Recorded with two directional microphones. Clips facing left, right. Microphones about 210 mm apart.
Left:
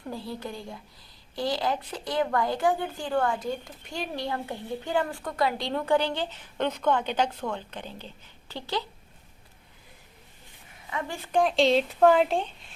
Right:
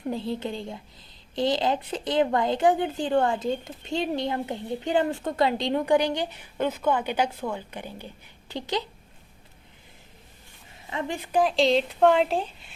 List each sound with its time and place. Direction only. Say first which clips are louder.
0.0 s a woman's voice: right 6 dB; 20° right (ahead or behind)
10.8 s a woman's voice: right 3 dB; 20° right (ahead or behind)
11.3 s speech: even; centre (ahead or behind)